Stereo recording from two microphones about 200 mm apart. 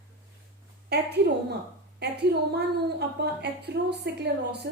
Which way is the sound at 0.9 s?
55° right (ahead or behind).